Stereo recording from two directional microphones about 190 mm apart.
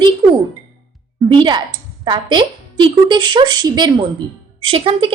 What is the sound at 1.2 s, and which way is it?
A woman's voice, 25° right (ahead or behind).